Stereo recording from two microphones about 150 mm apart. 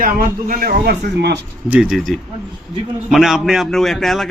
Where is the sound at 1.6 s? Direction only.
5° right (ahead or behind).